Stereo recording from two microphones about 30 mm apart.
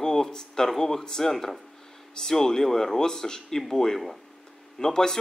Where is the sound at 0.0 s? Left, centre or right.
Centre.